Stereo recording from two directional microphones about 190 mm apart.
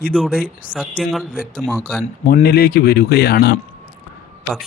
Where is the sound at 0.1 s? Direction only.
Centre (ahead or behind).